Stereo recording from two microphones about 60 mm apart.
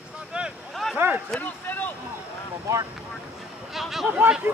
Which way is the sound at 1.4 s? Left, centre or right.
Left.